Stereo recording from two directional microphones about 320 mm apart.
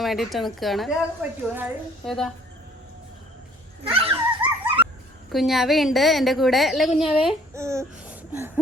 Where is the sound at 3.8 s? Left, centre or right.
Centre.